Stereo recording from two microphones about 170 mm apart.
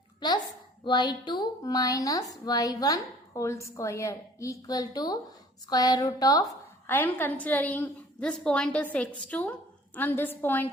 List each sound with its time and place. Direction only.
0.9 s a woman's voice: 25° left (ahead or behind)
6.8 s a woman's voice: 10° left (ahead or behind)